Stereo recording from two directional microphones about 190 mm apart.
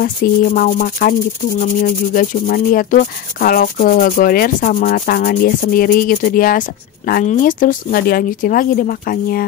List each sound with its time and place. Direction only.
0.0 s speech: 45° left (ahead or behind)